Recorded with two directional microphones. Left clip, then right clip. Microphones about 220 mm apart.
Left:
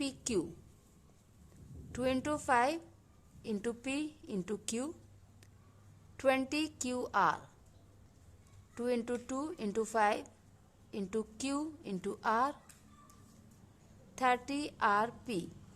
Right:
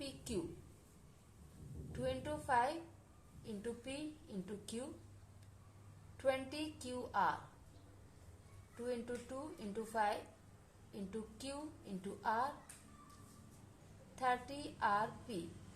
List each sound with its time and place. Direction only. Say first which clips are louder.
1.9 s a woman's voice: left 8 dB; 45° left (ahead or behind)
6.1 s a woman's voice: left 7 dB; 45° left (ahead or behind)
8.8 s a woman's voice: left 8 dB; 45° left (ahead or behind)
14.2 s a woman's voice: left 7 dB; 45° left (ahead or behind)